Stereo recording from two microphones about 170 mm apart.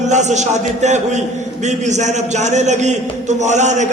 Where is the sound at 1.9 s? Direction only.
45° right (ahead or behind).